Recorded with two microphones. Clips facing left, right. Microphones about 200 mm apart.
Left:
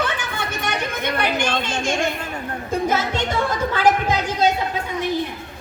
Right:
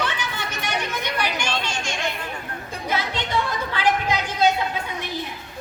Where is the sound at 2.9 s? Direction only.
45° left (ahead or behind).